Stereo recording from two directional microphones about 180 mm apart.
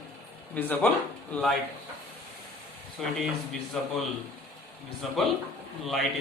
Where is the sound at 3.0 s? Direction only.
Centre (ahead or behind).